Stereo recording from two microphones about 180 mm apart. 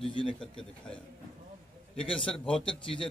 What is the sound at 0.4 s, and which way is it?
Speech, 5° left (ahead or behind).